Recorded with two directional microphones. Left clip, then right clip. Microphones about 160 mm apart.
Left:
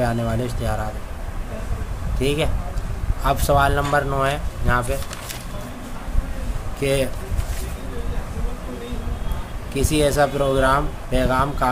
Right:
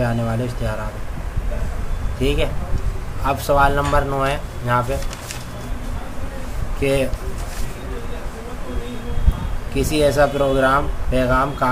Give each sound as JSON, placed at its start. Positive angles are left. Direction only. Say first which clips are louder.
{"t": 0.0, "sound": "speech", "louder": "even", "side_deg": 25}
{"t": 2.1, "sound": "speech", "louder": "right 1 dB", "side_deg": 25}
{"t": 6.8, "sound": "speech", "louder": "right 2 dB", "side_deg": 20}
{"t": 9.8, "sound": "speech", "louder": "right 2 dB", "side_deg": 20}